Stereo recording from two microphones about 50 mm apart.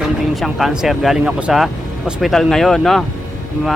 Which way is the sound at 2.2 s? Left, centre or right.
Centre.